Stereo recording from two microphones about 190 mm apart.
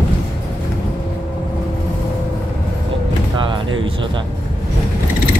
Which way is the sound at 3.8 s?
25° right (ahead or behind).